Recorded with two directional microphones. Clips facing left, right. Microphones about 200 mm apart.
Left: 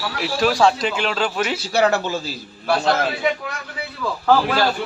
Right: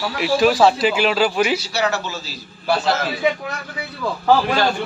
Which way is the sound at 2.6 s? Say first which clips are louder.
Even; centre (ahead or behind).